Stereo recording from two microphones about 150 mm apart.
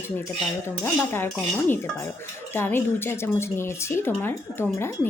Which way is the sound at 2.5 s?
15° left (ahead or behind).